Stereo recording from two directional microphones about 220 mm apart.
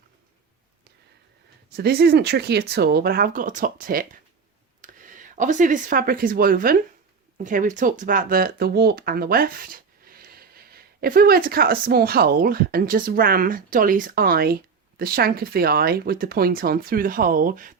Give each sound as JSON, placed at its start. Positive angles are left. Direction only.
{"t": 1.7, "sound": "speech", "side_deg": -45}